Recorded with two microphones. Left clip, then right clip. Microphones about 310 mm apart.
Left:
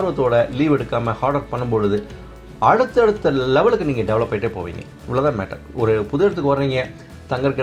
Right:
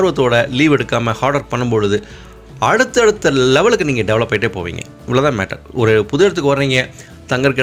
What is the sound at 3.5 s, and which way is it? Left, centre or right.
Speech, right.